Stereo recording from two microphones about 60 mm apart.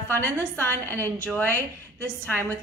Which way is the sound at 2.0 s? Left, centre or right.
Left.